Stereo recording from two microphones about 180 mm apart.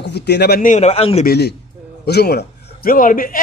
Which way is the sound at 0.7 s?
35° left (ahead or behind).